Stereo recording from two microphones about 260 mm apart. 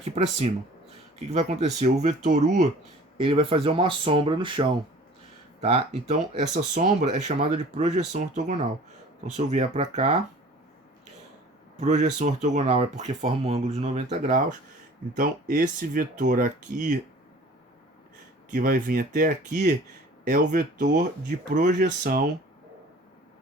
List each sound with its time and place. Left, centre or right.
0.0 s speech: right
11.8 s speech: right
18.5 s speech: right